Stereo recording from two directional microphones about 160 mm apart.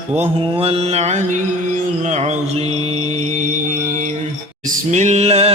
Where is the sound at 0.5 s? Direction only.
35° right (ahead or behind).